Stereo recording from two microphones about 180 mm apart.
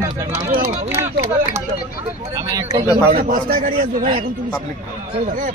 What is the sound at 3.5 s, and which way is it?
Speech, 50° right (ahead or behind).